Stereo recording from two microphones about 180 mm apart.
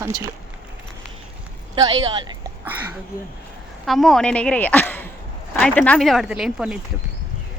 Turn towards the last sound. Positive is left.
turn(degrees=-5)  # may be behind; listen again after turning